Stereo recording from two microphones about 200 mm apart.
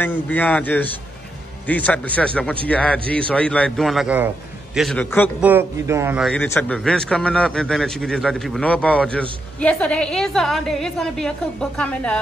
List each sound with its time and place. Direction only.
0.0 s a man's voice: 10° left (ahead or behind)
5.4 s speech: 10° right (ahead or behind)
6.2 s a man's voice: 5° left (ahead or behind)